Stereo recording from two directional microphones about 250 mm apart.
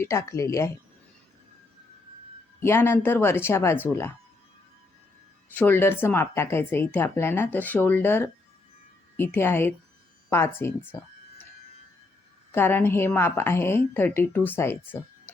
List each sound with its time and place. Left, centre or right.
0.0 s speech: centre
2.6 s speech: centre
5.5 s speech: centre
12.5 s speech: centre